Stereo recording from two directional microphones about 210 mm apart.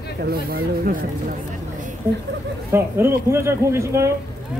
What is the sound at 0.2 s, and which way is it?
Speech, 45° right (ahead or behind).